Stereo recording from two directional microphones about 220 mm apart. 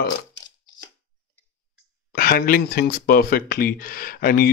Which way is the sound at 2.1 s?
40° left (ahead or behind).